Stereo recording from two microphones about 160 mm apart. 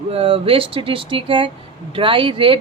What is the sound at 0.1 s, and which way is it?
Speech, 35° right (ahead or behind).